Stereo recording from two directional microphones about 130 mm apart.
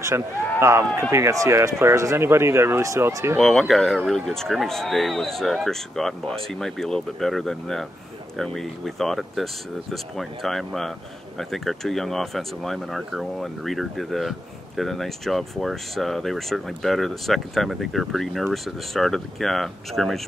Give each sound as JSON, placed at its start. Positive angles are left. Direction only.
{"t": 0.1, "sound": "speech", "side_deg": -20}
{"t": 3.3, "sound": "speech", "side_deg": 5}